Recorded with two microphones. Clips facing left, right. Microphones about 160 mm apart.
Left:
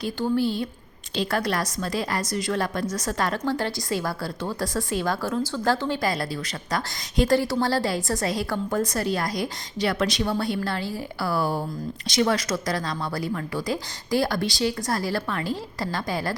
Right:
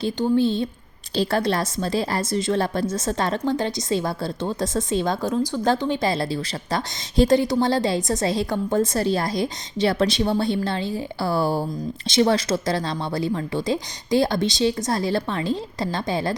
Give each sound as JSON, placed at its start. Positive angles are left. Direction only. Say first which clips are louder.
{"t": 0.0, "sound": "a woman's voice", "louder": "right 4 dB", "side_deg": -20}